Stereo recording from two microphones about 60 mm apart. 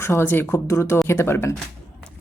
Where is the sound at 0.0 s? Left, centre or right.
Left.